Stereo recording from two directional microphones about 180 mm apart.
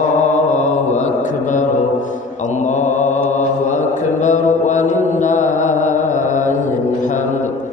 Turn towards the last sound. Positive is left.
turn(degrees=45)  # may be behind; listen again after turning